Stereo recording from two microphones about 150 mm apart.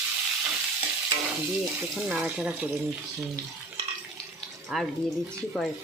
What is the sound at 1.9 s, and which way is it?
Speech, 5° right (ahead or behind).